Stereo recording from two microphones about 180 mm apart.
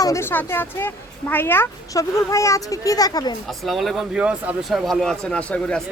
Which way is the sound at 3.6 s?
Centre (ahead or behind).